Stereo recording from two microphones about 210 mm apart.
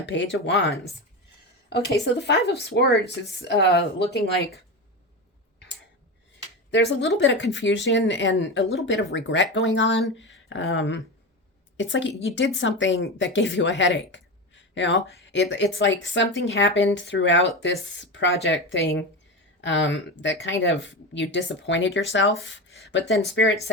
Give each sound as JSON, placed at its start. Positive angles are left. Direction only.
{"t": 0.0, "sound": "a woman's voice", "side_deg": 60}
{"t": 1.7, "sound": "a woman's voice", "side_deg": 55}
{"t": 6.7, "sound": "a woman's voice", "side_deg": 55}